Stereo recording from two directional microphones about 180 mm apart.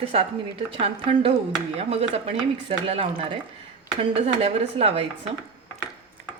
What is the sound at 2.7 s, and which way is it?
Speech, 30° right (ahead or behind).